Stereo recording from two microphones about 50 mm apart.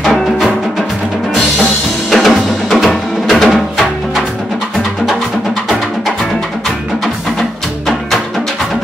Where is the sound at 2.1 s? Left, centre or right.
Centre.